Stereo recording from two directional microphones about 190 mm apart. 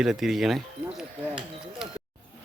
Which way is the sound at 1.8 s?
5° right (ahead or behind).